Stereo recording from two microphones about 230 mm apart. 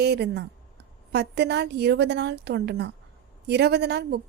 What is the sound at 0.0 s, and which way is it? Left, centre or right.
A woman's voice, right.